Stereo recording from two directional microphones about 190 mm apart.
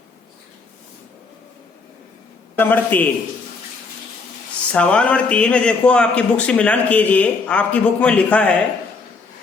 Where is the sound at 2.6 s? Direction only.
10° left (ahead or behind).